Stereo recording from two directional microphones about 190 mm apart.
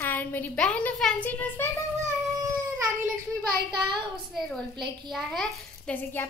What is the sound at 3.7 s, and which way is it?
Child singing, 25° right (ahead or behind).